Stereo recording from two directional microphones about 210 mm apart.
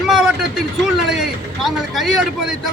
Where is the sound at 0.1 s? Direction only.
5° right (ahead or behind).